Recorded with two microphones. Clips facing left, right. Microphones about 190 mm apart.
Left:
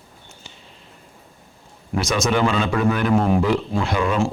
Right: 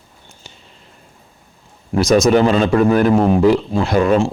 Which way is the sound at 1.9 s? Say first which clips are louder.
Right 8 dB; 35° right (ahead or behind).